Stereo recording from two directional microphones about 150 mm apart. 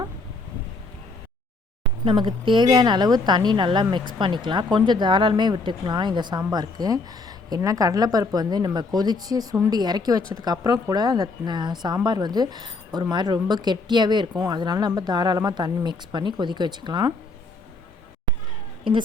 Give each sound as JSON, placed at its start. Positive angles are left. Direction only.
{"t": 2.0, "sound": "a woman's voice", "side_deg": -35}